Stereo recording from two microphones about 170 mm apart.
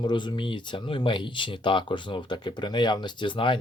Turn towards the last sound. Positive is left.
turn(degrees=30)  # may be behind; listen again after turning